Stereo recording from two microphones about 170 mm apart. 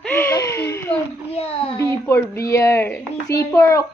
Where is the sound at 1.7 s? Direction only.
15° left (ahead or behind).